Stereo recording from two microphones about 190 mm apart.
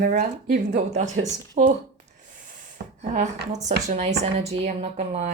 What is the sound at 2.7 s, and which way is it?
Speech, 55° right (ahead or behind).